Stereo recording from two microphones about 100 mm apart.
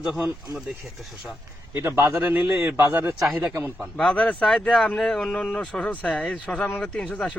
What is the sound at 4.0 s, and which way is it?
Speech, 10° left (ahead or behind).